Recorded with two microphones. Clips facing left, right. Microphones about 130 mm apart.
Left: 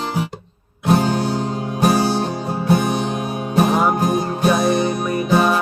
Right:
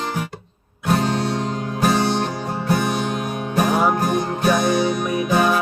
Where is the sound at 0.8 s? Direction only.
25° left (ahead or behind).